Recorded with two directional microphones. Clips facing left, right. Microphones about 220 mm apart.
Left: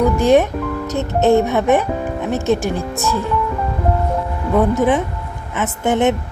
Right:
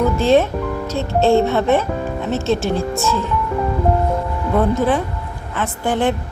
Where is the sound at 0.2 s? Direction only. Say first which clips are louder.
Left 1 dB; 15° left (ahead or behind).